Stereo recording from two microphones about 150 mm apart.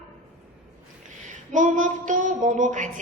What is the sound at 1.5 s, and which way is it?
A woman's voice, 55° right (ahead or behind).